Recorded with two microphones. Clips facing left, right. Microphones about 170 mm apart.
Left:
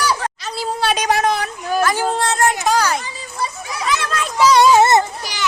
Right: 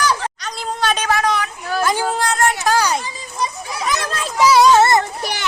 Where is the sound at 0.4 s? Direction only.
5° left (ahead or behind).